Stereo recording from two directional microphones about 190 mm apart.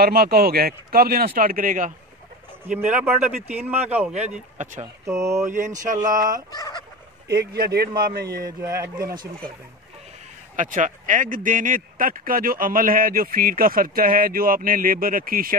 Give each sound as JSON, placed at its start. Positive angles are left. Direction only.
{"t": 0.0, "sound": "speech", "side_deg": -55}
{"t": 2.9, "sound": "speech", "side_deg": -5}
{"t": 5.0, "sound": "speech", "side_deg": -15}
{"t": 7.2, "sound": "speech", "side_deg": -55}
{"t": 8.5, "sound": "speech", "side_deg": -15}
{"t": 9.0, "sound": "speech", "side_deg": -50}
{"t": 10.5, "sound": "speech", "side_deg": -45}